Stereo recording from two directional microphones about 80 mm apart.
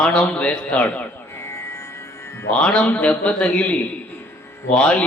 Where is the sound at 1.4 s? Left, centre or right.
Left.